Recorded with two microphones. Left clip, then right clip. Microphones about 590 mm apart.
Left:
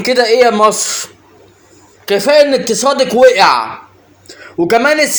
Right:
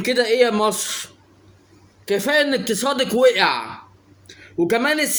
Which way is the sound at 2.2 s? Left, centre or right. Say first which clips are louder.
Left 11 dB; right.